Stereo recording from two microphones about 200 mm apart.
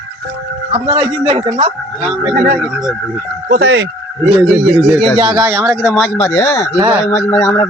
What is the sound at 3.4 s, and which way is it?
Speech, 55° right (ahead or behind).